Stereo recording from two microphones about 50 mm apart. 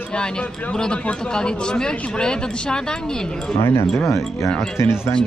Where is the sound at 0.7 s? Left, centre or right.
Centre.